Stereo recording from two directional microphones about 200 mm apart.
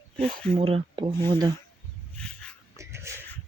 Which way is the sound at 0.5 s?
30° right (ahead or behind).